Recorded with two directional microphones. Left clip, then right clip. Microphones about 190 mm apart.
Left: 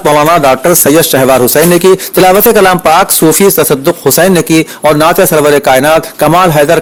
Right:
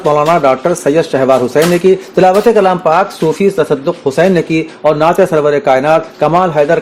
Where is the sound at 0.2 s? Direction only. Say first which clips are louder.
Left 3 dB; 45° left (ahead or behind).